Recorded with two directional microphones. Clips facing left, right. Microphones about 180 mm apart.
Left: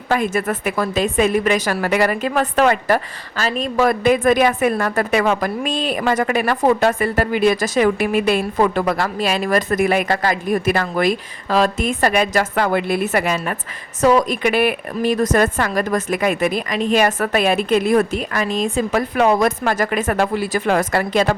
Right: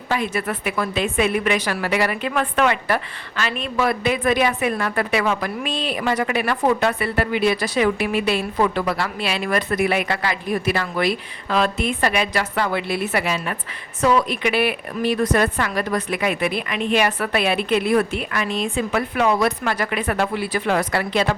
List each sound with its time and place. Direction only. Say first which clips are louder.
0.1 s a woman's voice: left 4 dB; 45° left (ahead or behind)